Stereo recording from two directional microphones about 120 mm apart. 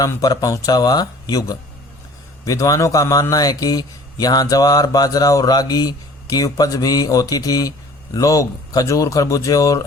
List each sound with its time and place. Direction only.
0.0 s a man's voice: 30° left (ahead or behind)